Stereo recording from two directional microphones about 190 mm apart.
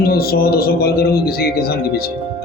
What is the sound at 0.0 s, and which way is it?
Speech, 55° left (ahead or behind).